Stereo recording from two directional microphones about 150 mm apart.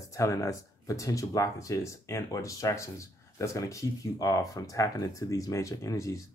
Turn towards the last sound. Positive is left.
turn(degrees=20)  # may be behind; listen again after turning